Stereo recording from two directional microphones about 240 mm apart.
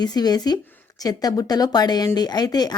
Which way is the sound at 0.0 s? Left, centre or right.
Centre.